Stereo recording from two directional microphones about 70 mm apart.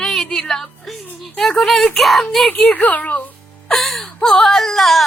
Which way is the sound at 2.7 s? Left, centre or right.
Left.